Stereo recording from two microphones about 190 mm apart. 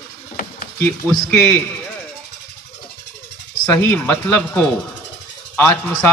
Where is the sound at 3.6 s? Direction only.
10° left (ahead or behind).